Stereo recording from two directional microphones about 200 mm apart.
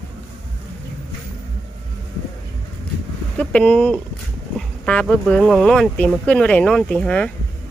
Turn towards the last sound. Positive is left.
turn(degrees=5)  # may be behind; listen again after turning